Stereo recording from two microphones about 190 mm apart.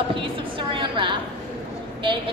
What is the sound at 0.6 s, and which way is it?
Speech, 25° right (ahead or behind).